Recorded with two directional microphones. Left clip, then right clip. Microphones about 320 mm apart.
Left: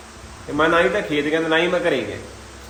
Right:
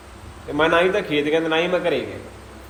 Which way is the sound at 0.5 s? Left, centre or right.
Centre.